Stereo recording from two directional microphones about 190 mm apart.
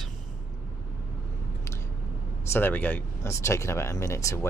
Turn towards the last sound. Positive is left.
turn(degrees=15)  # may be behind; listen again after turning